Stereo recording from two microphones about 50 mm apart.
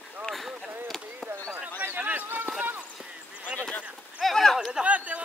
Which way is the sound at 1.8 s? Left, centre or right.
Right.